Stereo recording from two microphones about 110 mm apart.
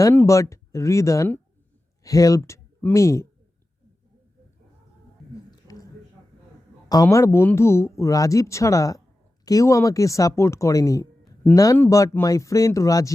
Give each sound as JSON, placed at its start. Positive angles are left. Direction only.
{"t": 0.3, "sound": "speech", "side_deg": 30}
{"t": 5.5, "sound": "a sound", "side_deg": 35}
{"t": 6.8, "sound": "speech", "side_deg": 35}